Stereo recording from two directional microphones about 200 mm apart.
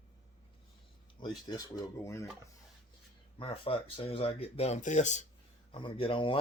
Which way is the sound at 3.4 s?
25° left (ahead or behind).